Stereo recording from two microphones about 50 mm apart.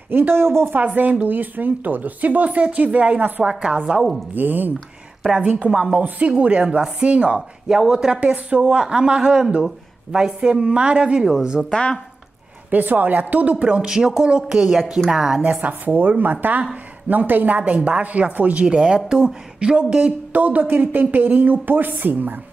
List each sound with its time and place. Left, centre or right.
0.1 s speech: right
0.7 s speech: right
4.3 s speech: right
5.4 s speech: right
5.7 s speech: centre
5.9 s speech: right
6.3 s speech: right
7.3 s speech: centre
8.2 s speech: right
12.7 s speech: right
13.8 s speech: centre
14.7 s speech: centre
15.4 s speech: right